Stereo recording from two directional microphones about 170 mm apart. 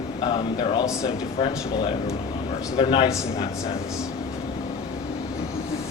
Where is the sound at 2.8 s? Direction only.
30° left (ahead or behind).